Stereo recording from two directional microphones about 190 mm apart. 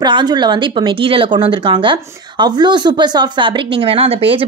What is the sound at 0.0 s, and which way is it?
A woman's voice, 25° right (ahead or behind).